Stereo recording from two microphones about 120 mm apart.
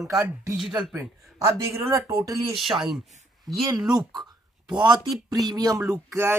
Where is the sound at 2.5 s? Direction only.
Centre (ahead or behind).